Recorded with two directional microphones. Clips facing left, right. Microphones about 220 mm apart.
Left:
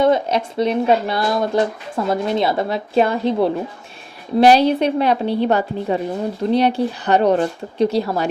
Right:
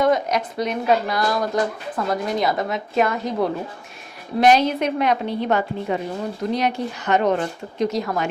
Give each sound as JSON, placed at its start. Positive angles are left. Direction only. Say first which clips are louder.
{"t": 0.0, "sound": "speech", "louder": "left 3 dB", "side_deg": 30}